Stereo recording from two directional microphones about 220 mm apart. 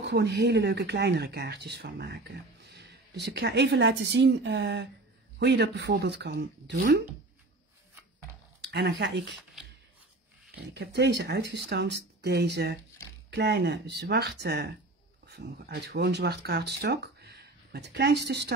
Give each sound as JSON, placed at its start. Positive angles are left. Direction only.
{"t": 0.0, "sound": "speech", "side_deg": -50}
{"t": 8.5, "sound": "speech", "side_deg": -50}
{"t": 10.5, "sound": "speech", "side_deg": -50}